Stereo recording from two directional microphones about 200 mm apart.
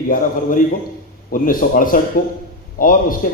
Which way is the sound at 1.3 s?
45° left (ahead or behind).